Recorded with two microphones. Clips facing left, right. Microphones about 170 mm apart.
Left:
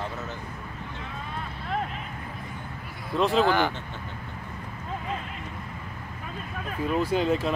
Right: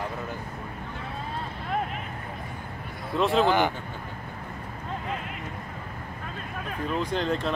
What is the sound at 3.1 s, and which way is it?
Speech, centre (ahead or behind).